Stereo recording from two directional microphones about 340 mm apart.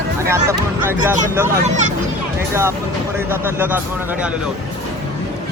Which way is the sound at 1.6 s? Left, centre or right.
Right.